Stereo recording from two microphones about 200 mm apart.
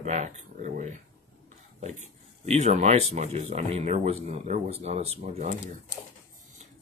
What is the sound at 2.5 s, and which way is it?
Speech, 35° right (ahead or behind).